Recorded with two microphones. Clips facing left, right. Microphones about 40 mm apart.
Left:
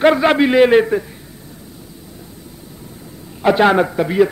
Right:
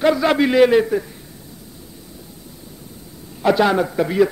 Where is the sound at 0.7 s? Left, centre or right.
Left.